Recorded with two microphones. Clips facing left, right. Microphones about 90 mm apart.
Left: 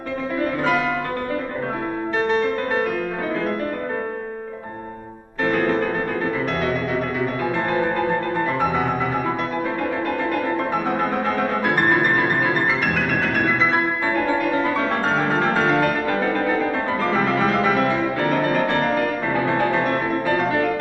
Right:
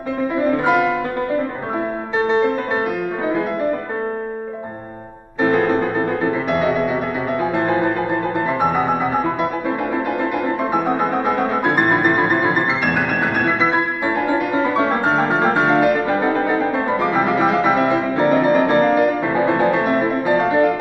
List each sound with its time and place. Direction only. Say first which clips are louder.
0.4 s music: right 5 dB; 15° right (ahead or behind)
2.1 s music: right 4 dB; 20° right (ahead or behind)
5.4 s music: right 4 dB; 20° right (ahead or behind)
10.7 s music: right 3 dB; 15° right (ahead or behind)